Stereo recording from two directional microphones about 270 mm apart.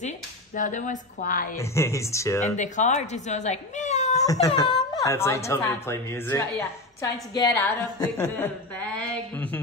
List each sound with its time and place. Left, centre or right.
0.6 s a woman's voice: left
1.6 s a woman's voice: centre
2.4 s a woman's voice: left; by 9.6 s centre